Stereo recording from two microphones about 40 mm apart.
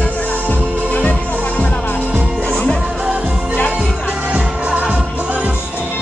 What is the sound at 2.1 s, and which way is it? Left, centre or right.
Music, right.